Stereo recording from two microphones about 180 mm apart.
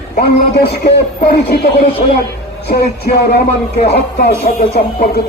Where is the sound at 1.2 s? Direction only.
60° left (ahead or behind).